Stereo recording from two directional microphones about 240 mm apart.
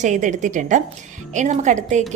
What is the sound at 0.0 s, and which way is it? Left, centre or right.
A woman's voice, right.